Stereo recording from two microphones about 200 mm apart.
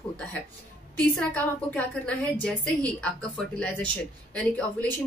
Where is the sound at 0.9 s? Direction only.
5° left (ahead or behind).